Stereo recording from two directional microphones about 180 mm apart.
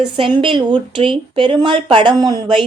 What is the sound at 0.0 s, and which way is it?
A woman's voice, 25° right (ahead or behind).